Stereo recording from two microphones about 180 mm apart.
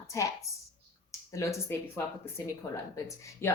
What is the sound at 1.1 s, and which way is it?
Speech, 15° left (ahead or behind).